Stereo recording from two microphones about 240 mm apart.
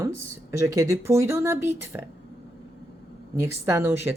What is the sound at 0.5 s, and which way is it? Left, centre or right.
Speech, centre.